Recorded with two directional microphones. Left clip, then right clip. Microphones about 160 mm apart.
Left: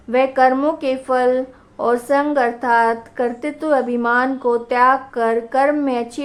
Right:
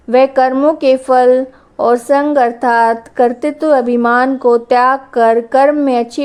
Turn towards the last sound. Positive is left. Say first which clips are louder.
# right 7 dB
turn(degrees=-40)  # may be behind; listen again after turning